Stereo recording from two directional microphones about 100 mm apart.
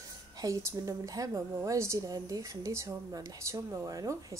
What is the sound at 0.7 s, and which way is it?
Speech, 35° right (ahead or behind).